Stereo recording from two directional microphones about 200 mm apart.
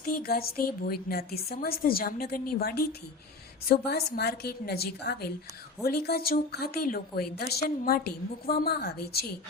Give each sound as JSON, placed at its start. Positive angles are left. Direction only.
{"t": 0.0, "sound": "a woman's voice", "side_deg": 50}